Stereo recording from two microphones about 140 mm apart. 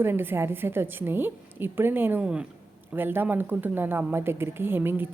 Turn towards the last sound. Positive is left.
turn(degrees=-15)  # may be behind; listen again after turning